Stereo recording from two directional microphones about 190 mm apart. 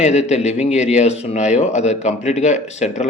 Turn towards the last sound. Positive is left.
turn(degrees=35)  # may be behind; listen again after turning